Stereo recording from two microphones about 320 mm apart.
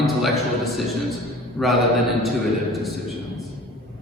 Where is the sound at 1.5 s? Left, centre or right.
Centre.